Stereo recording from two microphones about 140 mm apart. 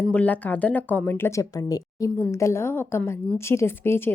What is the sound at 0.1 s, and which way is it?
Speech, 10° left (ahead or behind).